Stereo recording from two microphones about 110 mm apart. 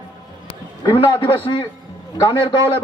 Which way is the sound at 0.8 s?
40° left (ahead or behind).